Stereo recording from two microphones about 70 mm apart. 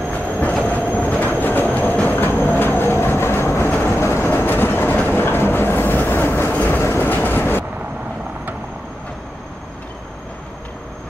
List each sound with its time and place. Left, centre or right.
0.1 s train: left
6.5 s train: left
6.8 s train: left